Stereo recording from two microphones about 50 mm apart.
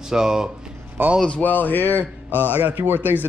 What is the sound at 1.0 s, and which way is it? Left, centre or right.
Speech, right.